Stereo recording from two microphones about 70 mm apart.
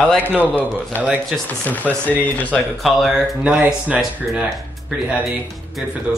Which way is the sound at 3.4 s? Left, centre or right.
Centre.